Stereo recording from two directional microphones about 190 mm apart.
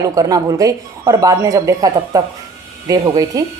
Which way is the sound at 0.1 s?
20° right (ahead or behind).